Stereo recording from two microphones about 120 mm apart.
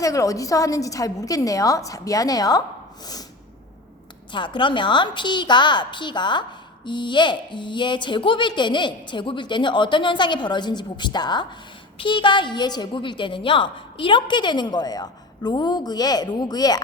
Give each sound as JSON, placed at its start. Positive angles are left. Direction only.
{"t": 0.0, "sound": "a woman's voice", "side_deg": 25}
{"t": 4.3, "sound": "a woman's voice", "side_deg": 40}